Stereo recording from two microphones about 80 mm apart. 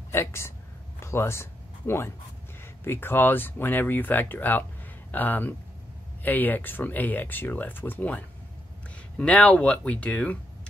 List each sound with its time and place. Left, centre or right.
0.1 s speech: left
9.2 s speech: centre